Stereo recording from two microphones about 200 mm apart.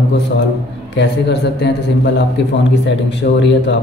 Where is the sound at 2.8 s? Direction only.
60° left (ahead or behind).